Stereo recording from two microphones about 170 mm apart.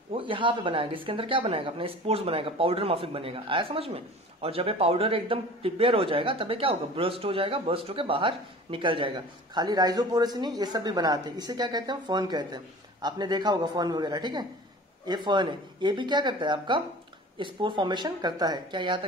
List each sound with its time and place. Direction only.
0.1 s speech: 30° right (ahead or behind)